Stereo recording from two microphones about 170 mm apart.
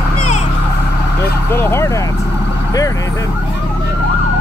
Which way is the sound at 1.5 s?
15° left (ahead or behind).